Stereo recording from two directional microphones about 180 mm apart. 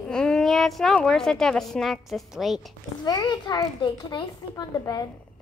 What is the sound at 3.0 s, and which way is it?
A woman's voice, 20° left (ahead or behind).